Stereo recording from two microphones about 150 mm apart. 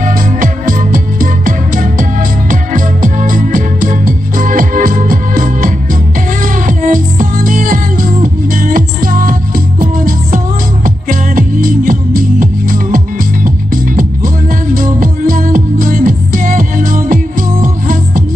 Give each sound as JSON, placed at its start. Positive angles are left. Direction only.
{"t": 0.0, "sound": "music", "side_deg": -65}
{"t": 14.8, "sound": "music", "side_deg": -65}